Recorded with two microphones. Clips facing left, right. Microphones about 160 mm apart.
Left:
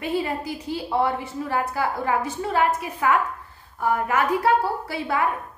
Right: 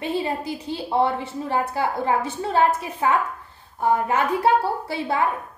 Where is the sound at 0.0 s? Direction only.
25° right (ahead or behind).